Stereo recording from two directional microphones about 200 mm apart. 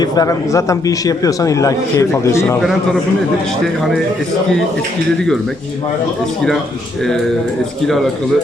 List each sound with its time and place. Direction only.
0.0 s a man's voice: 20° left (ahead or behind)